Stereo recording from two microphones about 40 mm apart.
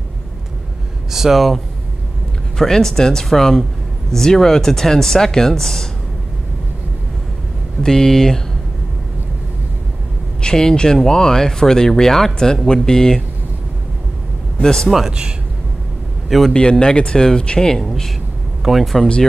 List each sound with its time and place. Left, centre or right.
1.1 s speech: centre
2.5 s speech: centre
7.8 s speech: centre
10.4 s speech: centre
14.6 s speech: centre
15.0 s speech: centre
16.3 s a man's voice: centre
16.5 s speech: centre
17.8 s speech: centre